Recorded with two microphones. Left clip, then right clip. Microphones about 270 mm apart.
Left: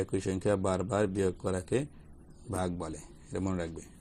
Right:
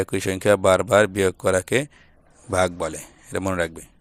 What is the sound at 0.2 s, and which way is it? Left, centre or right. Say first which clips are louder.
Speech: right 14 dB; right.